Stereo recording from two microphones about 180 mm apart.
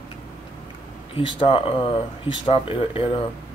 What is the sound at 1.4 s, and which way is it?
Speech, 30° left (ahead or behind).